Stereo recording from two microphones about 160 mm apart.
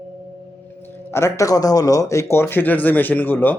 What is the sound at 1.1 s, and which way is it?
A man's voice, 15° left (ahead or behind).